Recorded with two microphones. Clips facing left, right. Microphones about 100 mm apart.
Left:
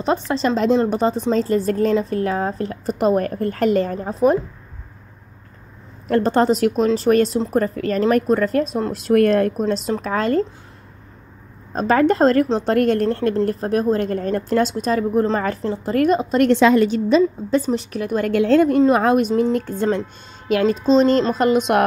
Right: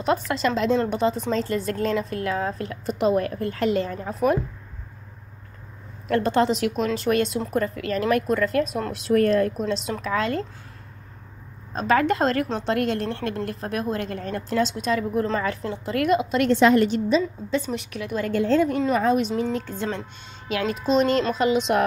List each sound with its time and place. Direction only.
0.0 s a woman's voice: 30° left (ahead or behind)
4.1 s speech: 30° left (ahead or behind)
6.0 s a woman's voice: 40° left (ahead or behind)
8.9 s speech: 55° left (ahead or behind)
11.7 s a woman's voice: 40° left (ahead or behind)
17.5 s speech: 40° left (ahead or behind)
18.3 s a woman's voice: 65° left (ahead or behind); by 20.7 s 50° left (ahead or behind)
20.7 s a woman's voice: 30° left (ahead or behind); by 21.8 s 55° left (ahead or behind)